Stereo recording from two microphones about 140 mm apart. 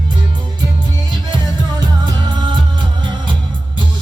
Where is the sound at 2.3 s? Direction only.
35° right (ahead or behind).